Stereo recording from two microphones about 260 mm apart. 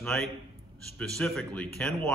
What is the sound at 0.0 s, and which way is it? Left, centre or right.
A man's voice, centre.